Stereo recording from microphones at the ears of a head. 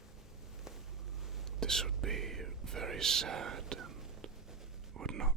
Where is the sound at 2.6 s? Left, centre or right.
Right.